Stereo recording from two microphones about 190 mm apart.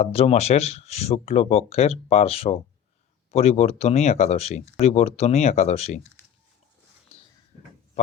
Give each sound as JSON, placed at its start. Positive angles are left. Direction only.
{"t": 0.0, "sound": "speech", "side_deg": 30}